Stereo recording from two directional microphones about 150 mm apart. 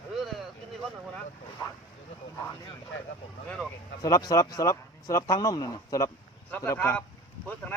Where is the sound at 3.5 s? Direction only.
5° left (ahead or behind).